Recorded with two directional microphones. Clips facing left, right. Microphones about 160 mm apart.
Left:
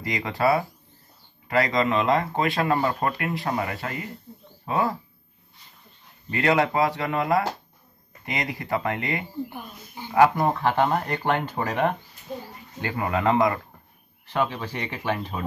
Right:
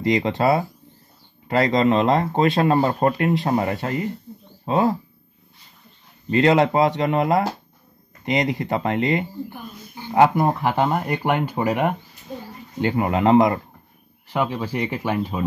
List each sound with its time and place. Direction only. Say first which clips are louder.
0.0 s speech: right 5 dB; 25° right (ahead or behind)
6.3 s speech: right 5 dB; 25° right (ahead or behind)
12.8 s speech: right 5 dB; 25° right (ahead or behind)
14.2 s speech: right 3 dB; 10° right (ahead or behind)